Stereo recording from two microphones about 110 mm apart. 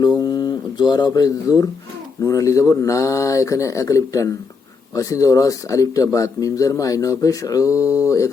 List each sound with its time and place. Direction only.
0.3 s speech: 40° left (ahead or behind)